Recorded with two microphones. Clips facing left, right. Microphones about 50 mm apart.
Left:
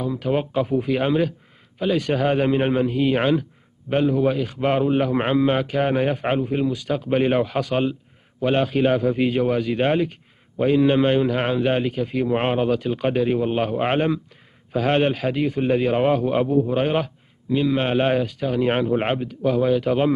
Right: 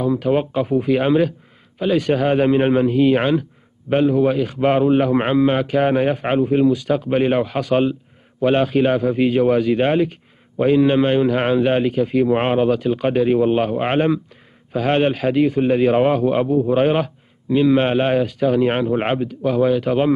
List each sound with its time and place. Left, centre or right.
0.2 s a man's voice: centre
7.1 s a man's voice: centre
14.7 s a man's voice: centre
15.8 s a man's voice: right
17.9 s a man's voice: centre; by 20.1 s right